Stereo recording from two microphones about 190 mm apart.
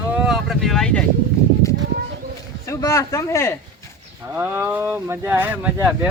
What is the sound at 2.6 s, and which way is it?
Speech, 15° left (ahead or behind).